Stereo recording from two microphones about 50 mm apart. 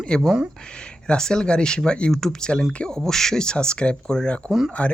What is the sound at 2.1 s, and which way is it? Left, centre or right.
Speech, centre.